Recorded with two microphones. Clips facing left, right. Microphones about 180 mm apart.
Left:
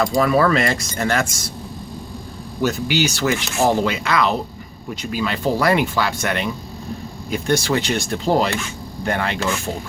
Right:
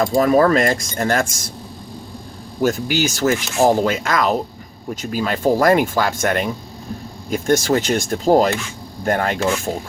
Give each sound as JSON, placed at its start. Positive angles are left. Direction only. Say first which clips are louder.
{"t": 0.2, "sound": "speech", "louder": "right 3 dB", "side_deg": -45}
{"t": 2.6, "sound": "speech", "louder": "right 1 dB", "side_deg": -45}